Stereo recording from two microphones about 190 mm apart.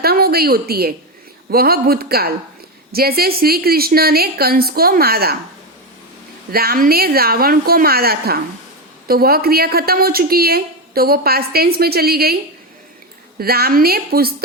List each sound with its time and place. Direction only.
0.0 s a woman's voice: 55° right (ahead or behind)
6.5 s a woman's voice: 55° right (ahead or behind)
13.4 s a woman's voice: 55° right (ahead or behind)